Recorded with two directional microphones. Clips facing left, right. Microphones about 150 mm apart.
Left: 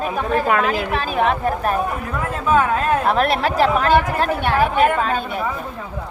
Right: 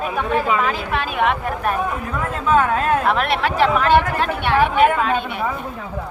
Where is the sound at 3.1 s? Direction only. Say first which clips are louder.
Left 1 dB; 40° left (ahead or behind).